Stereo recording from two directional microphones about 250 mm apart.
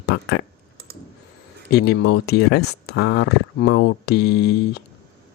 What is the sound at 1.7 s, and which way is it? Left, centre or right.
Speech, left.